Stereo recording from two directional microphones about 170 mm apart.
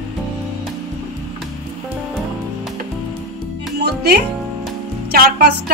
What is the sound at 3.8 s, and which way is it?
Music, 70° right (ahead or behind).